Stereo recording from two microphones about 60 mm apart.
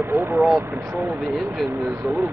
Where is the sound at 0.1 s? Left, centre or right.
Right.